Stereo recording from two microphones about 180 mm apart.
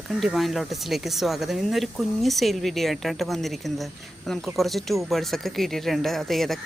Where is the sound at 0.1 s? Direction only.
Centre (ahead or behind).